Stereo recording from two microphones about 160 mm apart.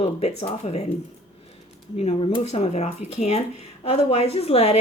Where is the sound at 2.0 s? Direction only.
40° left (ahead or behind).